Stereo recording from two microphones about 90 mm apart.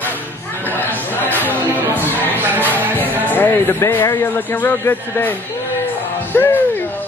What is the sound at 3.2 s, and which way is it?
Speech, 20° left (ahead or behind).